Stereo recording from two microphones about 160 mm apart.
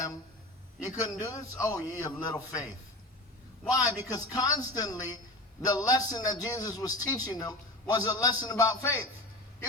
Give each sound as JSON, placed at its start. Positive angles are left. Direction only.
{"t": 0.8, "sound": "a man's voice", "side_deg": 20}
{"t": 3.7, "sound": "a man's voice", "side_deg": 20}